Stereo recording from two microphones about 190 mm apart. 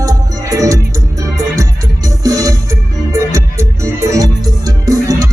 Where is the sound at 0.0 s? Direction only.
15° right (ahead or behind).